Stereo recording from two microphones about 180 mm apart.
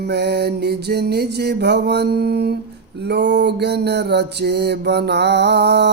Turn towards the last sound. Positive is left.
turn(degrees=-70)  # may be behind; listen again after turning